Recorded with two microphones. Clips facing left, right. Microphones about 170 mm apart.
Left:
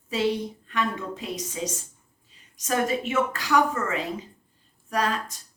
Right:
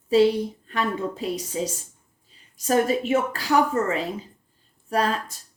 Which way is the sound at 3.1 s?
30° right (ahead or behind).